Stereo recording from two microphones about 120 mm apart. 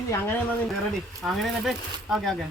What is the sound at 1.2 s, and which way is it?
Speech, centre (ahead or behind).